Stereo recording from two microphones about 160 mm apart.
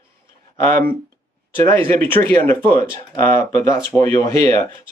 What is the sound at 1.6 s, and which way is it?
Speech, 15° left (ahead or behind).